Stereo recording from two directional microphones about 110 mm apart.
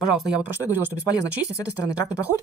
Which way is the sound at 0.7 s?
15° right (ahead or behind).